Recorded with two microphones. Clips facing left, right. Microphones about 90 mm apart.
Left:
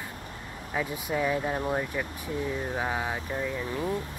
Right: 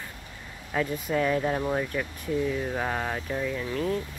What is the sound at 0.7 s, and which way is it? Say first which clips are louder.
Speech: right 3 dB; 10° left (ahead or behind).